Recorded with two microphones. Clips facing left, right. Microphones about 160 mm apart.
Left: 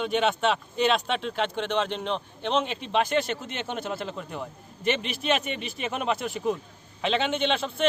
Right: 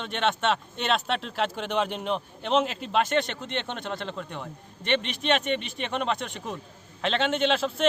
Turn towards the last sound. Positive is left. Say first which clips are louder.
# right 1 dB
turn(degrees=0)  # may be behind; listen again after turning